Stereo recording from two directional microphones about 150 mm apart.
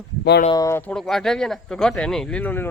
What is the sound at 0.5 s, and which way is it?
Speech, 20° left (ahead or behind).